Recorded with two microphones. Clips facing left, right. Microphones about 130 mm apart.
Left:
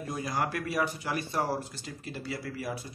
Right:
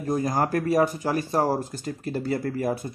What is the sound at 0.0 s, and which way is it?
Speech, 45° right (ahead or behind).